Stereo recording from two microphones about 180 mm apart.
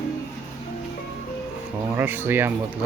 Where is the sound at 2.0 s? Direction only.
10° right (ahead or behind).